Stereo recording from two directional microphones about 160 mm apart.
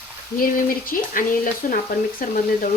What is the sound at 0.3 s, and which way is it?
Speech, 60° left (ahead or behind).